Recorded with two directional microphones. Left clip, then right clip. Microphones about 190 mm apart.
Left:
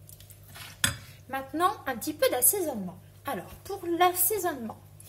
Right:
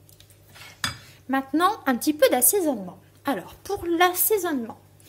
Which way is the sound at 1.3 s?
45° right (ahead or behind).